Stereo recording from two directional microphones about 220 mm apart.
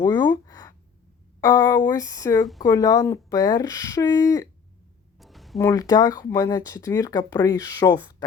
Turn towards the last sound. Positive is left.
turn(degrees=15)  # may be behind; listen again after turning